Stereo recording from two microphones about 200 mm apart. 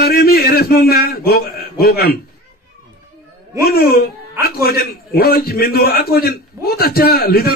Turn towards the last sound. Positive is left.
turn(degrees=50)  # may be behind; listen again after turning